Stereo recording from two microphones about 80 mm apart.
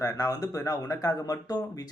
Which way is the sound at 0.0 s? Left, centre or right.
Left.